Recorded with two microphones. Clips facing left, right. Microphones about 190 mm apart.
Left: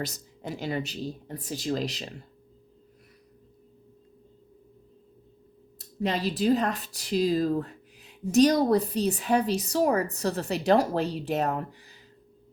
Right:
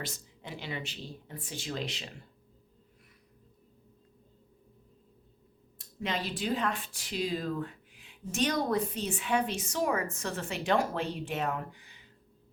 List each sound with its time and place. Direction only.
0.0 s speech: 40° left (ahead or behind)
6.0 s a woman's voice: 40° left (ahead or behind)